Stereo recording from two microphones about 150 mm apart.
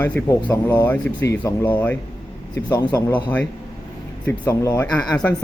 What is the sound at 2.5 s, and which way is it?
Speech, 25° left (ahead or behind).